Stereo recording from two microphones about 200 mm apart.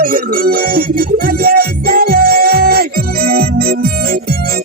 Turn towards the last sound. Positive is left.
turn(degrees=-50)  # may be behind; listen again after turning